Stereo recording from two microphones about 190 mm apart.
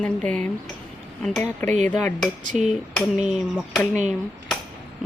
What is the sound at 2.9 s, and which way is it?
Speech, 5° right (ahead or behind).